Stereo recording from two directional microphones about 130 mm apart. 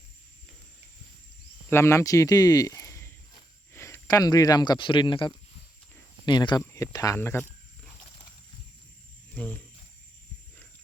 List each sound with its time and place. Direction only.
1.7 s speech: 20° left (ahead or behind)
6.7 s speech: 25° left (ahead or behind)
9.3 s speech: 10° left (ahead or behind)